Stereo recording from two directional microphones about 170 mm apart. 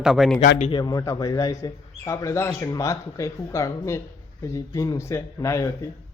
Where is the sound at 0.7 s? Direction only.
25° left (ahead or behind).